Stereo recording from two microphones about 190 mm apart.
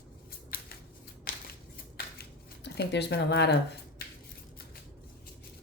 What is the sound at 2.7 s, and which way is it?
Speech, 60° left (ahead or behind).